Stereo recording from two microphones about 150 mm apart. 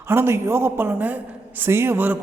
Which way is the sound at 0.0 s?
15° right (ahead or behind).